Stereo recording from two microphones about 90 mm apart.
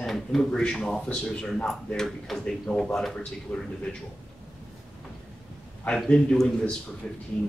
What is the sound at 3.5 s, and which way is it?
Speech, 25° left (ahead or behind).